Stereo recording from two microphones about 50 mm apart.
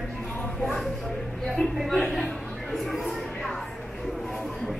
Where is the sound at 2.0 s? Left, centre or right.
Centre.